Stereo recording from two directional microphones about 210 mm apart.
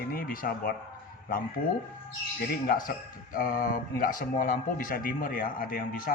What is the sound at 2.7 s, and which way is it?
A man's voice, 45° left (ahead or behind).